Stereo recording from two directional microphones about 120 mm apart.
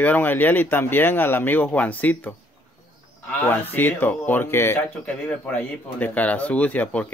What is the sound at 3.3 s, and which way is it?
Speech, 15° left (ahead or behind).